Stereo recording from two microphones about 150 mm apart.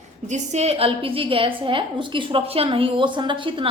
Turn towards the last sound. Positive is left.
turn(degrees=-35)  # may be behind; listen again after turning